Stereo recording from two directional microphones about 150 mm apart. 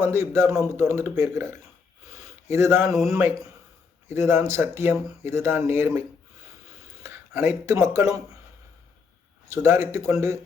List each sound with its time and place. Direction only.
0.0 s speech: 15° right (ahead or behind)
2.5 s speech: 20° right (ahead or behind)
7.0 s speech: 15° right (ahead or behind)
9.5 s a man's voice: 20° right (ahead or behind)